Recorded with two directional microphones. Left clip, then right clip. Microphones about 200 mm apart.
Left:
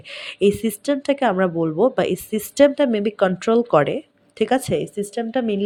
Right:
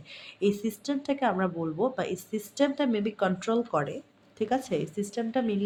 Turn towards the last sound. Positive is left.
turn(degrees=35)  # may be behind; listen again after turning